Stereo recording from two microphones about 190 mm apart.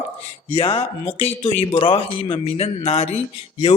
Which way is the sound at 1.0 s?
35° left (ahead or behind).